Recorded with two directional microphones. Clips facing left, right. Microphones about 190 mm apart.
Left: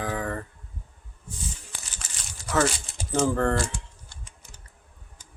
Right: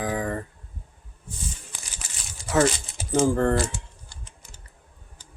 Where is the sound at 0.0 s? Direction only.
20° right (ahead or behind).